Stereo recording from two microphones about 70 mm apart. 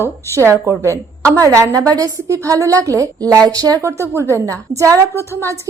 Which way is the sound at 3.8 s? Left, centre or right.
Right.